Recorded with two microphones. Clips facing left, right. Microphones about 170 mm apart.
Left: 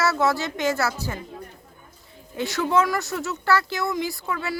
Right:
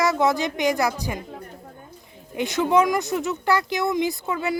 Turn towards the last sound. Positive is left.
turn(degrees=-20)  # may be behind; listen again after turning